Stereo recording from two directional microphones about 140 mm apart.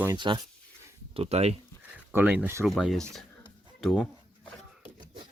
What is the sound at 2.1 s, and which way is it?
Speech, 10° right (ahead or behind).